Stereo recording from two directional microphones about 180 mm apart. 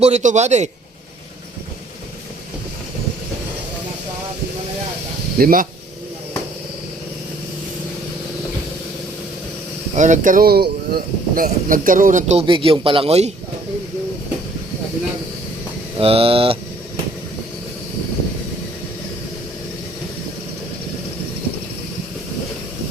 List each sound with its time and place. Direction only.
0.0 s a man's voice: 40° right (ahead or behind)
5.4 s speech: 50° right (ahead or behind)
9.9 s speech: 45° right (ahead or behind)
16.0 s a man's voice: 30° right (ahead or behind)